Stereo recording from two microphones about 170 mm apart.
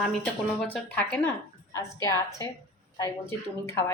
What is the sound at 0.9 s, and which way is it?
Speech, 10° left (ahead or behind).